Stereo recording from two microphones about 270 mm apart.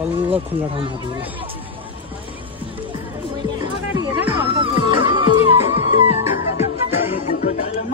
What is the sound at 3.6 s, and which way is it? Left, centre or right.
Music, centre.